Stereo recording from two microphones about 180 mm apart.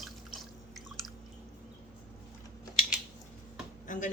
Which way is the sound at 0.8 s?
Centre (ahead or behind).